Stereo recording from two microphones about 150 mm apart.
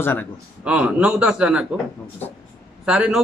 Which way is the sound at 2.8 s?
5° right (ahead or behind).